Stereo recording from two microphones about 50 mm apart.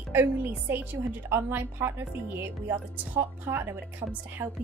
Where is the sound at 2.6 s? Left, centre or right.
Right.